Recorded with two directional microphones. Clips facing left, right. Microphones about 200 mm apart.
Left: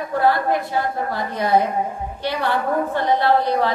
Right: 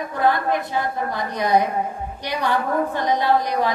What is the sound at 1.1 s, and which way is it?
A woman's voice, 15° right (ahead or behind).